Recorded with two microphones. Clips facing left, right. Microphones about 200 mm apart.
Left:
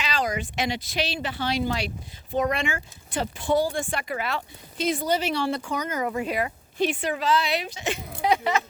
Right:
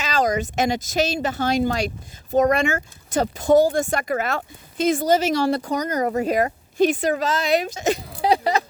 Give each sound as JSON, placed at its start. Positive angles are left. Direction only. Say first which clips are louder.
{"t": 0.0, "sound": "speech", "louder": "right 6 dB", "side_deg": -45}